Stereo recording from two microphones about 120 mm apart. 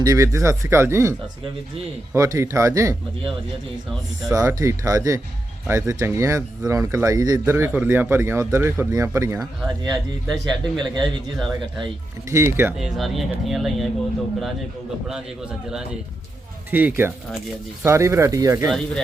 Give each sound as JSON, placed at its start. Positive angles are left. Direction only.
{"t": 0.0, "sound": "speech", "side_deg": -25}
{"t": 2.1, "sound": "speech", "side_deg": -25}
{"t": 4.4, "sound": "speech", "side_deg": -25}
{"t": 7.5, "sound": "a man's voice", "side_deg": -15}
{"t": 12.3, "sound": "speech", "side_deg": -20}
{"t": 12.8, "sound": "speech", "side_deg": 0}
{"t": 16.7, "sound": "a man's voice", "side_deg": -15}